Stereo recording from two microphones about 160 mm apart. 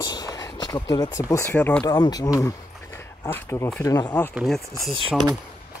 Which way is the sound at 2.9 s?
15° left (ahead or behind).